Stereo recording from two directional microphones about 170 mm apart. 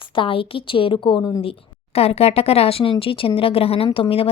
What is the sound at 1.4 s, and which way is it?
Speech, 35° left (ahead or behind).